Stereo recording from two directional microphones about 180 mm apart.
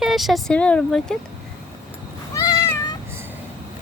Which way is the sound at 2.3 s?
20° left (ahead or behind).